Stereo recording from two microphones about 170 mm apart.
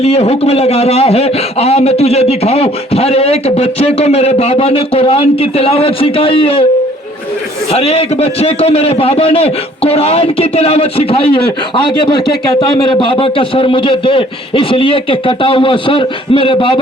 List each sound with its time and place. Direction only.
0.0 s a man's voice: 35° left (ahead or behind)
7.7 s a man's voice: 35° left (ahead or behind)